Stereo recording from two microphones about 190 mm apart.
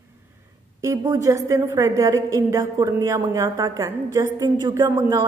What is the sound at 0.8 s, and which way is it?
A woman's voice, 15° right (ahead or behind).